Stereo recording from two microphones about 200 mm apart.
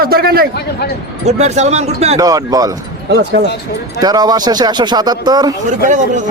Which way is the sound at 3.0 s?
55° right (ahead or behind).